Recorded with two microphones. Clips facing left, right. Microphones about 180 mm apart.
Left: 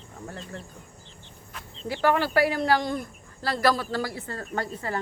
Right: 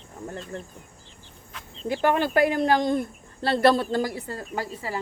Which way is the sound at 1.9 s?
20° right (ahead or behind).